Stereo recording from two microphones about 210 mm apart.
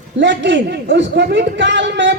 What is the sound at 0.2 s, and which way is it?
A man's voice, 55° right (ahead or behind).